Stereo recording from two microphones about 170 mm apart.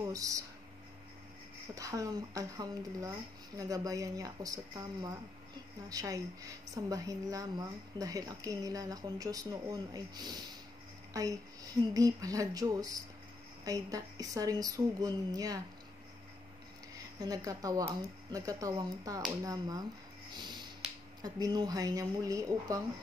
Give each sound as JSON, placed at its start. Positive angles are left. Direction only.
{"t": 0.0, "sound": "speech", "side_deg": -20}
{"t": 1.8, "sound": "speech", "side_deg": -20}
{"t": 17.2, "sound": "speech", "side_deg": -20}
{"t": 20.8, "sound": "finger snapping", "side_deg": -5}
{"t": 21.2, "sound": "speech", "side_deg": -25}